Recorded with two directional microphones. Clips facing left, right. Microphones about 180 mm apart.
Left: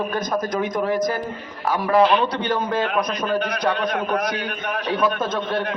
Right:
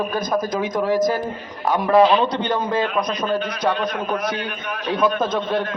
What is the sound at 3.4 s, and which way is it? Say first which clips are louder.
A man's voice: even; 55° left (ahead or behind).